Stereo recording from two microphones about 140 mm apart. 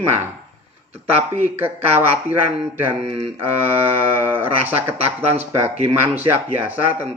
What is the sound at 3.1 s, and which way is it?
Speech, 40° right (ahead or behind).